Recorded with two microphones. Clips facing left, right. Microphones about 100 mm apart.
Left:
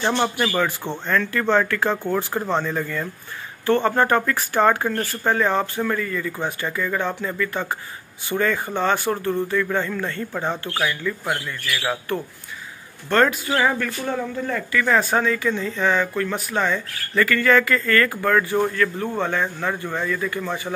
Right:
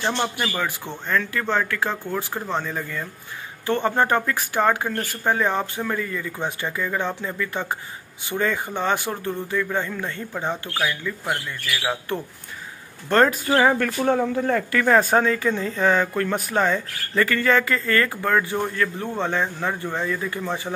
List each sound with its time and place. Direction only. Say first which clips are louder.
0.0 s speech: left 3 dB; 5° left (ahead or behind)
3.6 s speech: left 2 dB; 15° right (ahead or behind)
13.1 s speech: right 1 dB; 35° right (ahead or behind)
14.3 s speech: right 3 dB; 55° right (ahead or behind); by 20.7 s 25° right (ahead or behind)